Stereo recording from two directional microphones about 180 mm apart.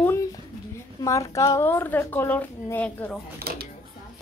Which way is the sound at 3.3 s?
60° right (ahead or behind).